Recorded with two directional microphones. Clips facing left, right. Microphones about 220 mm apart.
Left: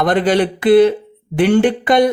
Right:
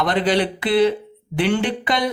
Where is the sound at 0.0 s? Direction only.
50° left (ahead or behind).